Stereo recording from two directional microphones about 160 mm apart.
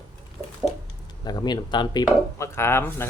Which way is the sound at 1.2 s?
25° left (ahead or behind).